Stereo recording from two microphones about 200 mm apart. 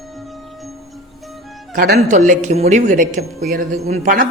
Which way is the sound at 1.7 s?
45° right (ahead or behind).